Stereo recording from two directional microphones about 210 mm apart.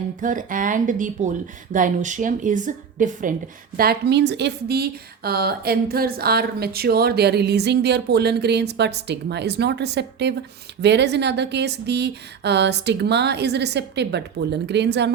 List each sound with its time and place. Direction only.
0.2 s speech: 40° right (ahead or behind)
3.8 s speech: 50° right (ahead or behind)